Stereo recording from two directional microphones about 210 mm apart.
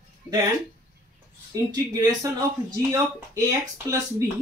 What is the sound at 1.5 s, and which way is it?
Speech, 15° right (ahead or behind).